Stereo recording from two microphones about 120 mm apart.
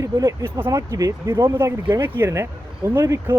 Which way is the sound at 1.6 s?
20° right (ahead or behind).